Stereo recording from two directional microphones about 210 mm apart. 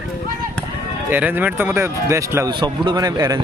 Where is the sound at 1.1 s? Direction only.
10° right (ahead or behind).